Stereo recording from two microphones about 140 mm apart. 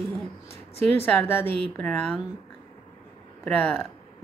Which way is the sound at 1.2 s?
15° left (ahead or behind).